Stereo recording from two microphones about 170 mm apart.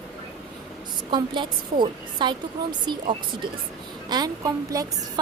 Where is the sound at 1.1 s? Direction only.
25° right (ahead or behind).